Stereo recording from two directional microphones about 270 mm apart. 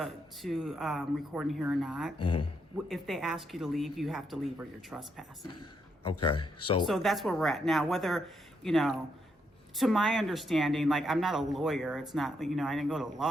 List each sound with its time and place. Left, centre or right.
0.0 s speech: centre
2.2 s a man's voice: centre
2.7 s speech: centre
6.3 s speech: left
6.8 s speech: centre